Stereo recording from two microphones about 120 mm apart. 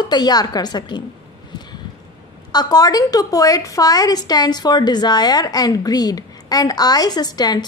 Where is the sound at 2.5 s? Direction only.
35° left (ahead or behind).